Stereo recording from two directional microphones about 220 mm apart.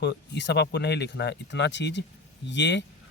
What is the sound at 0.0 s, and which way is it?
Speech, 50° left (ahead or behind).